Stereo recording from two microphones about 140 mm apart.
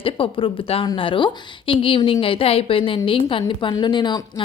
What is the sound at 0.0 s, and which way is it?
A woman's voice, 40° left (ahead or behind).